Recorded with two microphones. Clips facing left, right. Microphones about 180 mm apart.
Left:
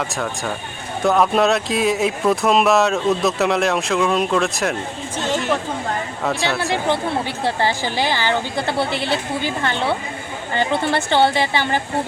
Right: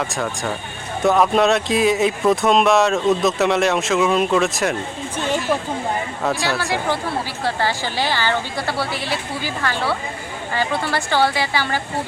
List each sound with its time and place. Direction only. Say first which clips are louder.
0.0 s speech: right 1 dB; centre (ahead or behind)
6.2 s speech: even; centre (ahead or behind)
6.8 s speech: left 2 dB; 20° left (ahead or behind)